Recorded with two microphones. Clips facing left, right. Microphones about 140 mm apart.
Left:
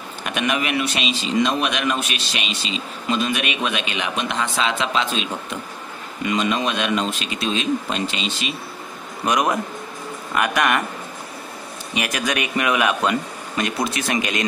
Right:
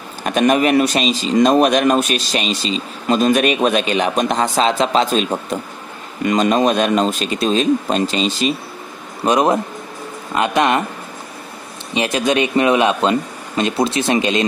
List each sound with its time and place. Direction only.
0.2 s a man's voice: 40° right (ahead or behind)
11.9 s speech: 25° right (ahead or behind)